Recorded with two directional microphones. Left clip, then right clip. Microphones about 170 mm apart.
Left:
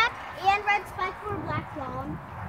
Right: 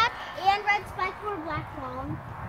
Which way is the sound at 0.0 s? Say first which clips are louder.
Even; 60° left (ahead or behind).